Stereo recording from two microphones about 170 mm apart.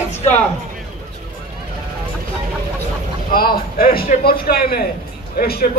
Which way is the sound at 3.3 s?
60° left (ahead or behind).